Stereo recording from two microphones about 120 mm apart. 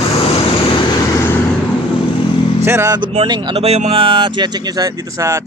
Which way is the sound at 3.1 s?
45° right (ahead or behind).